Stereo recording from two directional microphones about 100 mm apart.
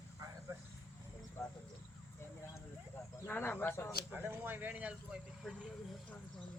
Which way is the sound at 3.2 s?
20° left (ahead or behind).